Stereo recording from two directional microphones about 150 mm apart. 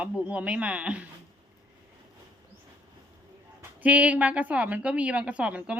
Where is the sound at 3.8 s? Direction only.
10° right (ahead or behind).